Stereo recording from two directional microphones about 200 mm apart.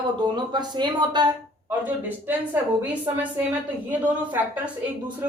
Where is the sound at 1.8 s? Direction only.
10° right (ahead or behind).